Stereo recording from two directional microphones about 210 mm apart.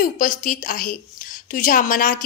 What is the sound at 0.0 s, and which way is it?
A woman's voice, 40° left (ahead or behind).